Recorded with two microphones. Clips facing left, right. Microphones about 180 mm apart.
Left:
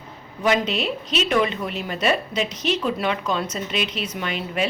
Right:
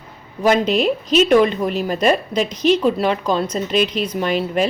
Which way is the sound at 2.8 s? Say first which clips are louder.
Right 6 dB; 35° right (ahead or behind).